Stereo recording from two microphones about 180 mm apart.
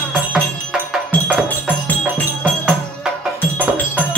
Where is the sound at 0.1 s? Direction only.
5° right (ahead or behind).